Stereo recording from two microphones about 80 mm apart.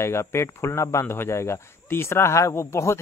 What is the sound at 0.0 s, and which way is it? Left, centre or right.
Speech, left.